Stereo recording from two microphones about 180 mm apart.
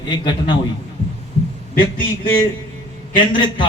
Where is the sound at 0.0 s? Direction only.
25° left (ahead or behind).